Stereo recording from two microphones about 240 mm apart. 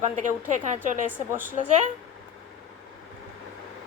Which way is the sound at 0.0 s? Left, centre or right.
Right.